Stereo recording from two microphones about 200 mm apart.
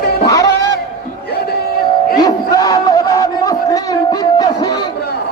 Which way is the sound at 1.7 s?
50° left (ahead or behind).